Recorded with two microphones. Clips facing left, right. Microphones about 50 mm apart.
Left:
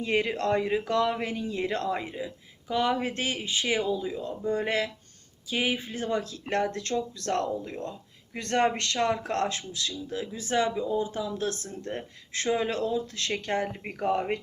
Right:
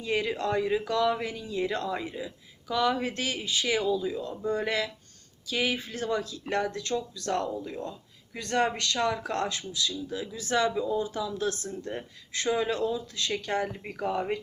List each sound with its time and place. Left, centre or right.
0.0 s speech: left
6.3 s speech: left